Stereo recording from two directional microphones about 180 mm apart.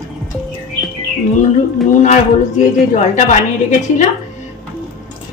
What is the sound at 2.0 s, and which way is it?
A woman's voice, 40° left (ahead or behind).